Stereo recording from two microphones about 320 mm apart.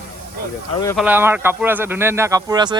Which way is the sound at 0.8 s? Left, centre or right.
Centre.